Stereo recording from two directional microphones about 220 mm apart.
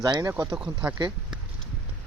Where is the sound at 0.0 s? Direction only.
15° right (ahead or behind).